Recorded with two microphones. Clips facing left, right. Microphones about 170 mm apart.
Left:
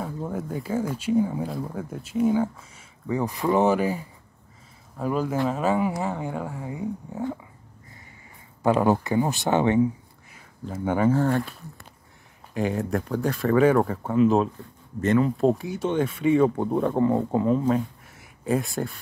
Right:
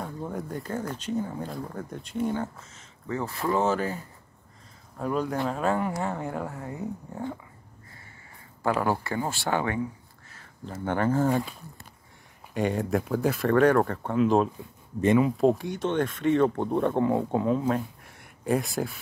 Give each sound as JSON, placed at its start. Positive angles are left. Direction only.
{"t": 0.0, "sound": "speech", "side_deg": 0}
{"t": 8.6, "sound": "speech", "side_deg": 20}
{"t": 10.3, "sound": "speech", "side_deg": 5}
{"t": 12.5, "sound": "speech", "side_deg": 0}
{"t": 14.6, "sound": "speech", "side_deg": -10}
{"t": 15.3, "sound": "speech", "side_deg": 0}